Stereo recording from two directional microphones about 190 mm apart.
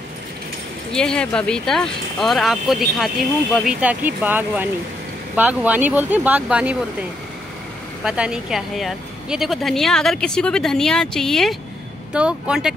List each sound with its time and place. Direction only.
0.9 s a woman's voice: 5° left (ahead or behind)